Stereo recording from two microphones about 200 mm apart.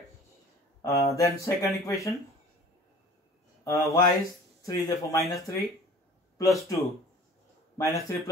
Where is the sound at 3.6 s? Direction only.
15° left (ahead or behind).